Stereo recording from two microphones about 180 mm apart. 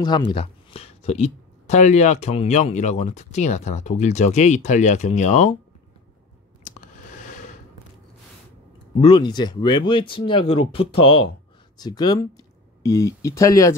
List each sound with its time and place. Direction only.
0.3 s speech: 30° left (ahead or behind)
9.1 s speech: 25° left (ahead or behind)